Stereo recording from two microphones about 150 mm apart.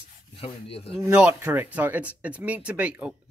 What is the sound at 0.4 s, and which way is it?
Speech, 40° left (ahead or behind).